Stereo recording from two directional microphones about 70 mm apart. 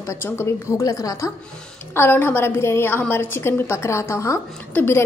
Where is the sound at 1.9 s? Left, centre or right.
Left.